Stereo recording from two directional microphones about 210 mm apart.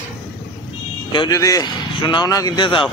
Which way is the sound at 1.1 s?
20° left (ahead or behind).